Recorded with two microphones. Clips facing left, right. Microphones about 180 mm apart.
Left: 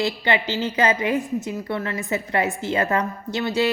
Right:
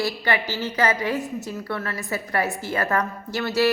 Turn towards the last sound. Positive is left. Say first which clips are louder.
# even
turn(degrees=20)  # may be behind; listen again after turning